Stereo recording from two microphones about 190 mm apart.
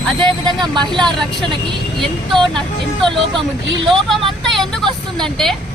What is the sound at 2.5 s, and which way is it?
Speech, centre (ahead or behind).